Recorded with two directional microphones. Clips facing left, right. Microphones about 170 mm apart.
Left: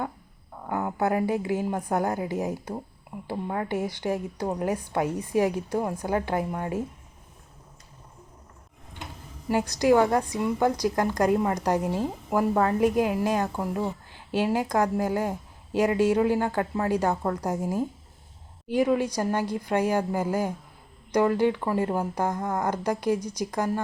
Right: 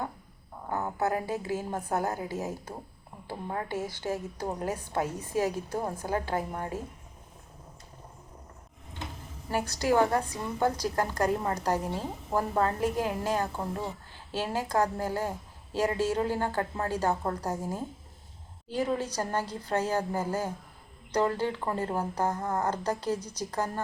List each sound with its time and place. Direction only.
0.7 s a sound: 15° left (ahead or behind)
1.0 s a woman's voice: 15° left (ahead or behind)
9.5 s a woman's voice: 15° left (ahead or behind)